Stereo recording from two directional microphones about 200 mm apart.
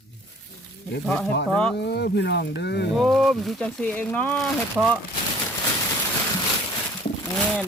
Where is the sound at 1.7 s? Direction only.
55° left (ahead or behind).